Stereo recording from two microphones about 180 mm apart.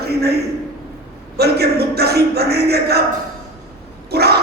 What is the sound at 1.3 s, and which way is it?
A man's voice, 65° right (ahead or behind).